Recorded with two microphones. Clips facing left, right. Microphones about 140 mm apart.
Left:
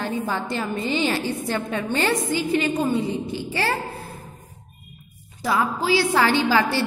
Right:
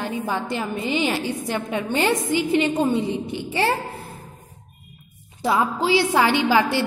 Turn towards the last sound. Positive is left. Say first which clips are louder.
# right 1 dB
turn(degrees=-15)  # may be behind; listen again after turning